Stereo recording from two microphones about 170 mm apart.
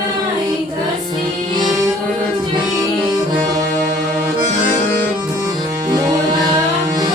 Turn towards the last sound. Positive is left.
turn(degrees=-25)  # may be behind; listen again after turning